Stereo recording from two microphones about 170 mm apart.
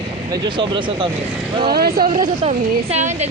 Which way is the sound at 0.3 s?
25° right (ahead or behind).